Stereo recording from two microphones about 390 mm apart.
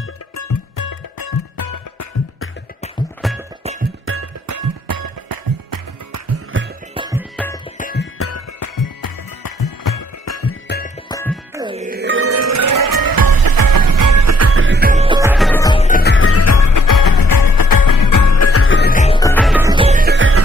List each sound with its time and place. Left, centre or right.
0.7 s music: left
3.2 s music: centre
4.0 s music: right
4.5 s music: right
6.2 s music: right
6.9 s music: centre
7.3 s music: centre
7.7 s music: left
11.1 s music: centre
11.5 s music: centre; by 16.9 s left
17.0 s music: left; by 20.4 s right